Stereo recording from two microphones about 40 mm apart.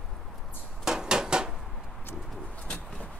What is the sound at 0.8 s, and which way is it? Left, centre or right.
Dishes, centre.